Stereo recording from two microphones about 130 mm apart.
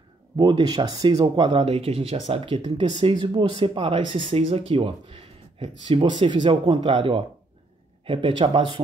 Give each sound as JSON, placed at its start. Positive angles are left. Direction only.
{"t": 0.4, "sound": "speech", "side_deg": -35}